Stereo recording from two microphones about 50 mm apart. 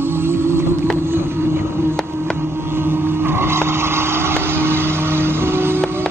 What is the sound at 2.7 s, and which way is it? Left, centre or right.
Vehicle, right.